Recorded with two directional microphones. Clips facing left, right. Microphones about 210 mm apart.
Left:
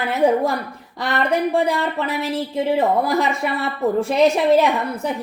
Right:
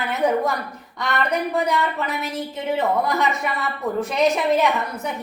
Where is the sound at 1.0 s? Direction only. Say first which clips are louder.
Left 3 dB; 35° left (ahead or behind).